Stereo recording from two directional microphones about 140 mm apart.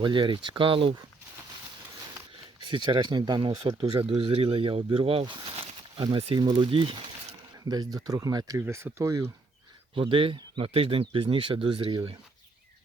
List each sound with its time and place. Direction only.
0.0 s speech: 35° right (ahead or behind)
2.6 s speech: 35° right (ahead or behind)
7.7 s speech: 25° right (ahead or behind)
9.9 s speech: 40° right (ahead or behind)